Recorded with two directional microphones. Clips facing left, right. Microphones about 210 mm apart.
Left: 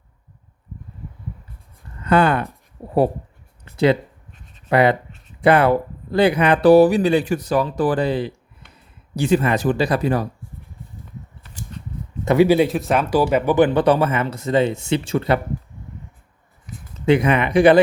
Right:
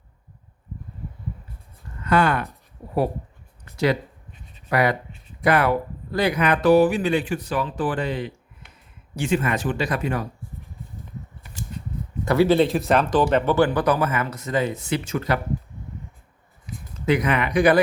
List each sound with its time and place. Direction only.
2.0 s speech: 25° left (ahead or behind)
4.7 s speech: 25° left (ahead or behind)
12.2 s speech: 20° left (ahead or behind)
17.1 s speech: 25° left (ahead or behind)